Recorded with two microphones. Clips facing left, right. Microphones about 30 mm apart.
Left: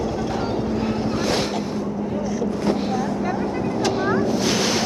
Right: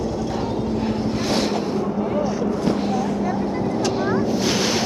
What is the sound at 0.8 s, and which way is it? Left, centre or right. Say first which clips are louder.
Vehicle: even; centre.